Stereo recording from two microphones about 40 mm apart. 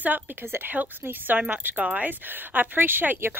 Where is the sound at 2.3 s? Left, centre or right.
Right.